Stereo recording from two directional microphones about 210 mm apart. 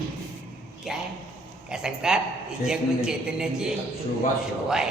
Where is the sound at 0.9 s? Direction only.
Centre (ahead or behind).